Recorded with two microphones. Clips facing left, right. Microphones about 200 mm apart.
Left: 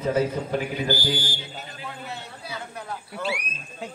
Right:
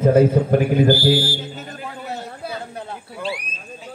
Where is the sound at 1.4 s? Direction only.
45° right (ahead or behind); by 3.0 s 30° right (ahead or behind).